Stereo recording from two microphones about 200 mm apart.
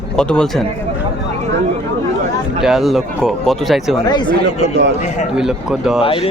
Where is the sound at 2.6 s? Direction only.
Centre (ahead or behind).